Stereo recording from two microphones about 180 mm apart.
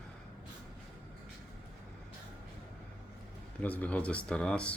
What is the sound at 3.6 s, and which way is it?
Speech, 10° left (ahead or behind).